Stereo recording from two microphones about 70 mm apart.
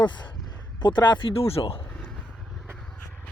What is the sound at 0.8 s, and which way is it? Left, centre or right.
Speech, left.